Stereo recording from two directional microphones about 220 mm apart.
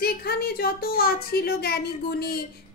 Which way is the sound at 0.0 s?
45° left (ahead or behind).